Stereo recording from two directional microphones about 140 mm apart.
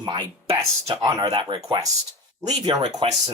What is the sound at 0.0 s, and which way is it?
Speech, 30° right (ahead or behind).